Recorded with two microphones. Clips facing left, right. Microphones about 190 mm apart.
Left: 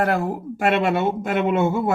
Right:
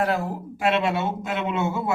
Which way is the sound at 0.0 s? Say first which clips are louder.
Left 3 dB; 55° left (ahead or behind).